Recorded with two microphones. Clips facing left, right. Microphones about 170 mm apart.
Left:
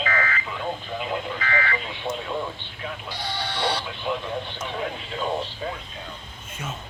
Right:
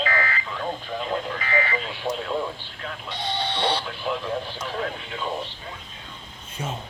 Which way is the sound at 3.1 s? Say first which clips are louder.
Right 5 dB; 25° right (ahead or behind).